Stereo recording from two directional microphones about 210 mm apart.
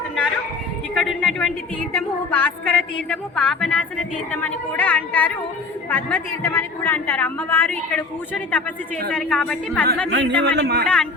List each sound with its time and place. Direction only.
0.9 s a woman's voice: centre (ahead or behind)
10.1 s a man's voice: 55° right (ahead or behind)
10.8 s a woman's voice: 5° left (ahead or behind)